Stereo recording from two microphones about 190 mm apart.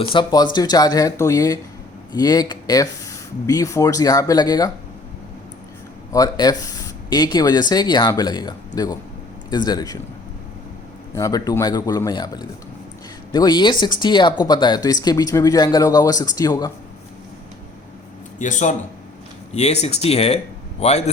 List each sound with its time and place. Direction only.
0.1 s speech: 25° left (ahead or behind)
6.1 s speech: 20° left (ahead or behind)
11.1 s speech: 15° left (ahead or behind)
18.3 s speech: 40° left (ahead or behind)